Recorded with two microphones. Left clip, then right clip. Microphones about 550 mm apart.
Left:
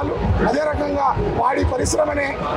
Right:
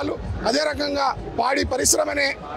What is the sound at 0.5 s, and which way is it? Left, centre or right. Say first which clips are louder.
A man's voice: even; right.